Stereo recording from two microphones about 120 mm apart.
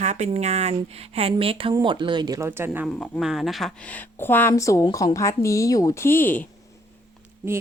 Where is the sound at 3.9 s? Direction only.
15° left (ahead or behind).